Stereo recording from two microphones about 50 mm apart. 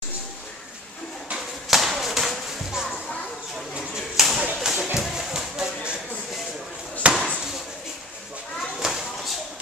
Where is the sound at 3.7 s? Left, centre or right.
Centre.